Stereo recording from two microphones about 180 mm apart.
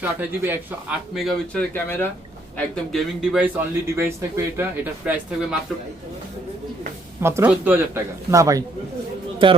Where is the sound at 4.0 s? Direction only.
15° right (ahead or behind).